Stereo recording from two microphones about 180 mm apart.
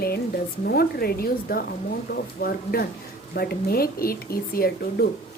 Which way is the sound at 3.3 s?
55° left (ahead or behind).